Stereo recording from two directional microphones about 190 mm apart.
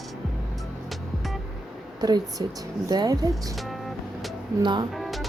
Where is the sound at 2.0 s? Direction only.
20° right (ahead or behind).